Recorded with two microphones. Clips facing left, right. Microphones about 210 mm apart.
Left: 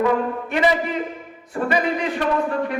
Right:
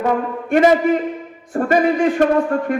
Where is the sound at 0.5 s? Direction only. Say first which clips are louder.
Right 8 dB; 50° right (ahead or behind).